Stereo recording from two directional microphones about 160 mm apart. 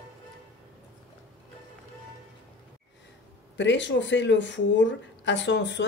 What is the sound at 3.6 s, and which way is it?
Speech, 90° left.